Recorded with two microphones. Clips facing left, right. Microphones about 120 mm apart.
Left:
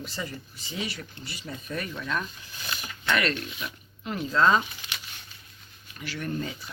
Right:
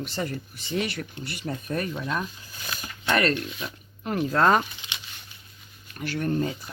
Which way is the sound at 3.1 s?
40° right (ahead or behind).